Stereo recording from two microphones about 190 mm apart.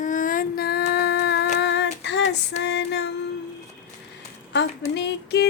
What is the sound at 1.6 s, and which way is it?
Female singing, 65° left (ahead or behind).